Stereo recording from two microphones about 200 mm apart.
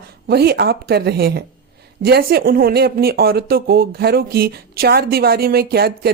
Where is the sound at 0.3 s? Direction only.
55° right (ahead or behind).